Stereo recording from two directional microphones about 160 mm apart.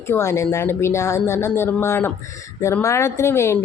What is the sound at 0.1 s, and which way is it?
Speech, 20° left (ahead or behind).